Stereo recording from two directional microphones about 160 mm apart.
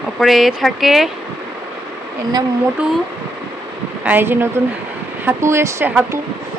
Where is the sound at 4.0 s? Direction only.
10° right (ahead or behind).